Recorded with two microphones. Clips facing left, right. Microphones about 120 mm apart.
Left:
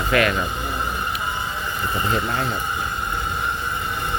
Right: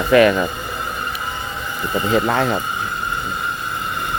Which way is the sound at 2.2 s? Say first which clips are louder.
Right 7 dB; 90° right.